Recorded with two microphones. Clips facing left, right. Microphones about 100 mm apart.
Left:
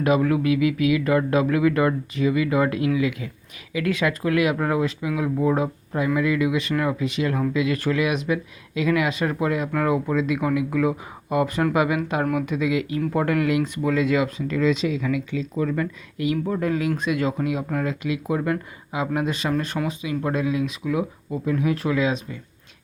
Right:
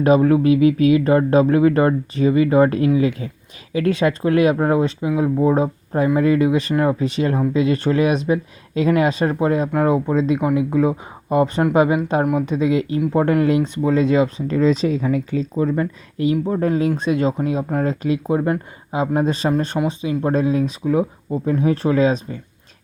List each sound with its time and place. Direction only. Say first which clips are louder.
0.0 s speech: right 6 dB; 30° right (ahead or behind)